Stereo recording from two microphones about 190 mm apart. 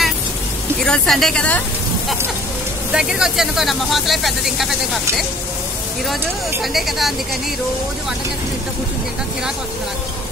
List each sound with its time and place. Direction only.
0.7 s speech: 5° left (ahead or behind)
2.9 s speech: 5° right (ahead or behind)
6.6 s speech: centre (ahead or behind)